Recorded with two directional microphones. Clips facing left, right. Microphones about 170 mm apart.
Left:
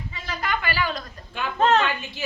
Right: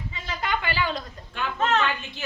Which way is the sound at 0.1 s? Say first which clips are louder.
Even; 20° right (ahead or behind).